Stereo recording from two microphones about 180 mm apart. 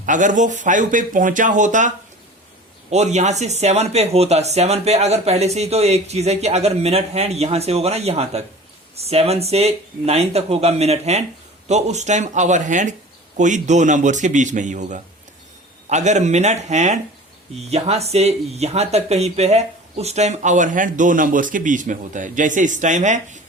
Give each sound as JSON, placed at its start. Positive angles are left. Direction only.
{"t": 0.0, "sound": "speech", "side_deg": -45}
{"t": 2.9, "sound": "speech", "side_deg": -40}